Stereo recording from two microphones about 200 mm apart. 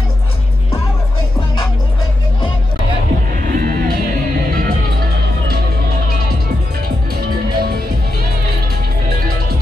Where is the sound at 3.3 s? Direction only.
45° right (ahead or behind).